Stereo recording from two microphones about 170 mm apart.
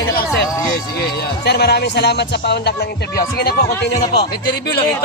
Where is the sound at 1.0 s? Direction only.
75° left (ahead or behind).